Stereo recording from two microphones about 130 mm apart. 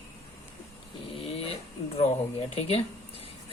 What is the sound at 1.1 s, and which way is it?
Dog, 50° left (ahead or behind).